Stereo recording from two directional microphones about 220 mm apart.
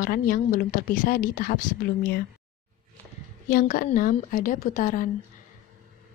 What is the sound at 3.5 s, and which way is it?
A woman's voice, 40° left (ahead or behind).